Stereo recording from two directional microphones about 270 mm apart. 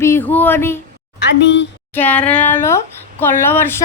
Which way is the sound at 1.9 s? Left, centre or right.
Centre.